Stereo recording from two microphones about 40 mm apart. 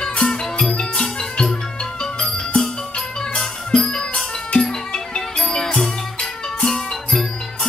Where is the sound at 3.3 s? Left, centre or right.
Centre.